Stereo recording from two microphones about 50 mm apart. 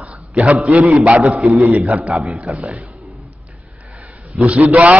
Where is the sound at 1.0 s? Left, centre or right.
Right.